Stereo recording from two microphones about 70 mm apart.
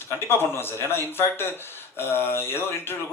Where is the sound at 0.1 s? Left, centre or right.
Left.